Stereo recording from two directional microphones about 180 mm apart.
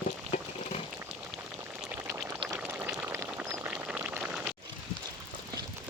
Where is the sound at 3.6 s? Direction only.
5° right (ahead or behind).